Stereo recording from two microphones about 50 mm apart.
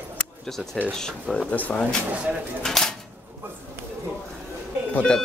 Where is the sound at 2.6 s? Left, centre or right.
Centre.